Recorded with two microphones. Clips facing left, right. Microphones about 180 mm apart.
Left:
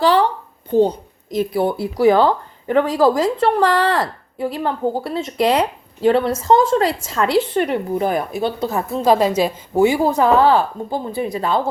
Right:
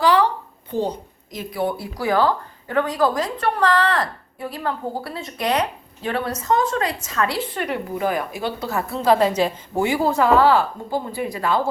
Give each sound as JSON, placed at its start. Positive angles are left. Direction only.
{"t": 0.0, "sound": "a sound", "side_deg": 30}
{"t": 1.4, "sound": "speech", "side_deg": 30}
{"t": 8.6, "sound": "a woman's voice", "side_deg": 20}